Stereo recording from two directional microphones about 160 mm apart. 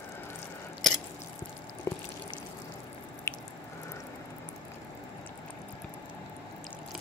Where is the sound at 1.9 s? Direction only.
15° left (ahead or behind).